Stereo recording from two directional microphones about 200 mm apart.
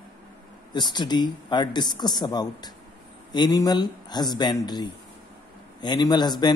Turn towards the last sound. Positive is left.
turn(degrees=20)  # may be behind; listen again after turning